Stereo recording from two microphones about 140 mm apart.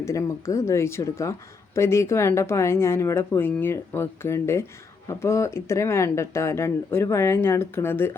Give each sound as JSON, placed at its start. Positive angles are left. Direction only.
{"t": 0.0, "sound": "speech", "side_deg": 20}